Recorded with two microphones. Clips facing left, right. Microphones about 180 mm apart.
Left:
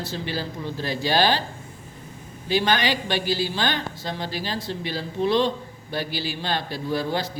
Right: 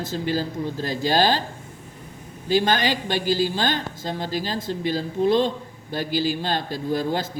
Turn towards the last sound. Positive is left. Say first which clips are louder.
# right 1 dB
turn(degrees=-45)  # may be behind; listen again after turning